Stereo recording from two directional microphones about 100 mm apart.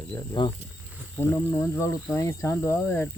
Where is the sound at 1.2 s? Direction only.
25° left (ahead or behind).